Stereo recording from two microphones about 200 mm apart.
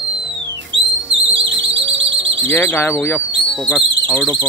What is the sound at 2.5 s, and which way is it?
Speech, 10° left (ahead or behind).